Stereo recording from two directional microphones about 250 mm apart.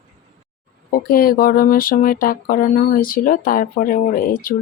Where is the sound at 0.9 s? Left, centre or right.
Left.